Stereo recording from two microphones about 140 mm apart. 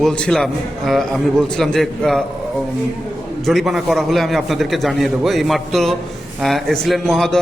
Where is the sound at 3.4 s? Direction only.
Centre (ahead or behind).